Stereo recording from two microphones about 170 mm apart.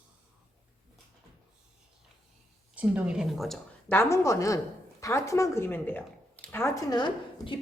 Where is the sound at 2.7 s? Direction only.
5° right (ahead or behind).